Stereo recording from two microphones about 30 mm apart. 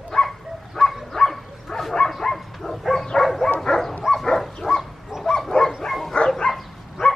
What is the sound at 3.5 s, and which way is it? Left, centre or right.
Bow-wow, left.